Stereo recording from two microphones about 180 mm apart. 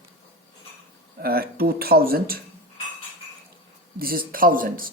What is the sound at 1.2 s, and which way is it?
Speech, 55° right (ahead or behind).